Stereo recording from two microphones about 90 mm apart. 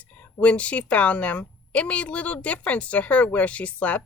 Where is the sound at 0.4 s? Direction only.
15° left (ahead or behind).